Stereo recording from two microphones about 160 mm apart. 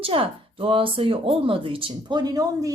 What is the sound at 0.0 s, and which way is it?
Speech, 35° right (ahead or behind).